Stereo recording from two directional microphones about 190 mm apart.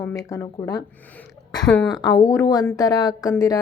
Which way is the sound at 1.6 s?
5° left (ahead or behind).